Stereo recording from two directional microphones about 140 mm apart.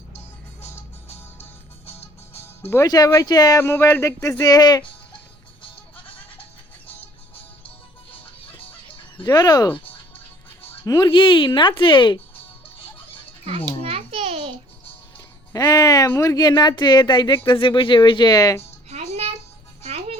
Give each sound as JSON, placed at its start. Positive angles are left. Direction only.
{"t": 1.9, "sound": "music", "side_deg": 45}
{"t": 2.6, "sound": "speech", "side_deg": 15}
{"t": 2.8, "sound": "speech", "side_deg": 25}
{"t": 3.6, "sound": "speech", "side_deg": 15}
{"t": 5.7, "sound": "music", "side_deg": 40}
{"t": 8.1, "sound": "fowl", "side_deg": 40}
{"t": 9.3, "sound": "speech", "side_deg": 30}
{"t": 10.6, "sound": "music", "side_deg": 15}
{"t": 10.9, "sound": "speech", "side_deg": 30}
{"t": 13.7, "sound": "babbling", "side_deg": -40}
{"t": 15.5, "sound": "speech", "side_deg": 25}
{"t": 18.9, "sound": "music", "side_deg": -50}